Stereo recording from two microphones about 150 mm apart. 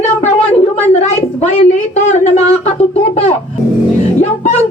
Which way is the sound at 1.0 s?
50° left (ahead or behind).